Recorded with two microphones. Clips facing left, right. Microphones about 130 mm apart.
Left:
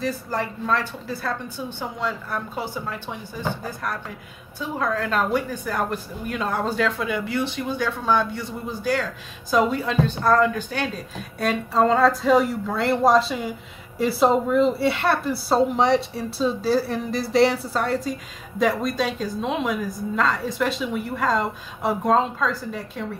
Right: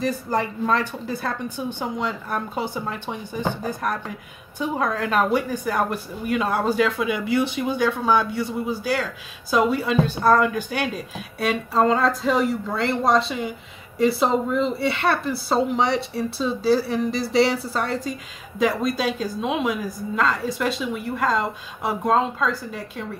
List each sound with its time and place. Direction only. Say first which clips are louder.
0.0 s a woman's voice: right 3 dB; 20° right (ahead or behind); by 23.0 s centre (ahead or behind)